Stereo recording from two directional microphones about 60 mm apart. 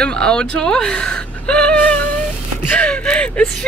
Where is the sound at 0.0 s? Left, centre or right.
Centre.